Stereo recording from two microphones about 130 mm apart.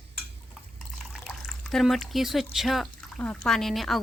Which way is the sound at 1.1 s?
Centre (ahead or behind).